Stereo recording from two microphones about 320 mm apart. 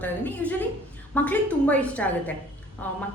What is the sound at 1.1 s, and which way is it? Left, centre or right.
A woman's voice, centre.